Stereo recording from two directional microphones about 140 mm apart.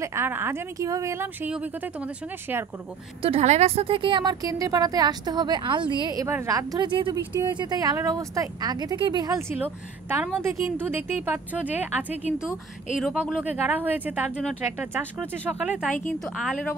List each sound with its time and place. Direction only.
0.0 s a woman's voice: 20° right (ahead or behind)
3.2 s a woman's voice: 45° right (ahead or behind)
9.5 s a woman's voice: 15° right (ahead or behind)
16.1 s a woman's voice: 5° left (ahead or behind)